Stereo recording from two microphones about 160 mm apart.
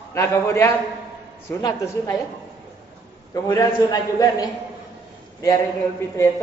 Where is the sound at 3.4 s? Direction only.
20° left (ahead or behind).